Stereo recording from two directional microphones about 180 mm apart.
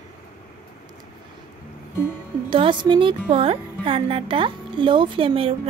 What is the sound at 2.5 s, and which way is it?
Speech, 25° right (ahead or behind).